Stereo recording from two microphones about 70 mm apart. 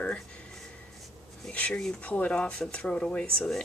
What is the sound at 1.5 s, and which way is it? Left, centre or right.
Speech, centre.